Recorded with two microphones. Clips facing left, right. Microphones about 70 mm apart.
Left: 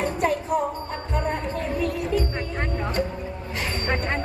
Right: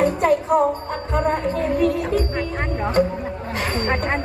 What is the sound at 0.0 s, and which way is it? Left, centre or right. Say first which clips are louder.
Music: right 6 dB; right.